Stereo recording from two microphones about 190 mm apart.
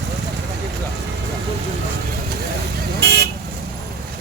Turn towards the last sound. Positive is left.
turn(degrees=-60)  # may be behind; listen again after turning